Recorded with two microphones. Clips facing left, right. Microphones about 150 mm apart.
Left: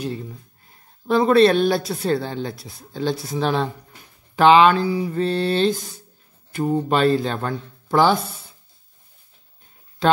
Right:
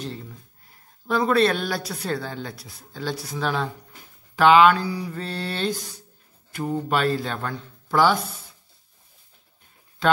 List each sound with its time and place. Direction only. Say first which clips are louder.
1.0 s speech: left 5 dB; 25° left (ahead or behind)